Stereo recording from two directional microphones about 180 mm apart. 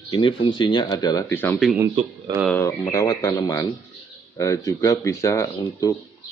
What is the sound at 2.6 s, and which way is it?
Speech, 15° left (ahead or behind).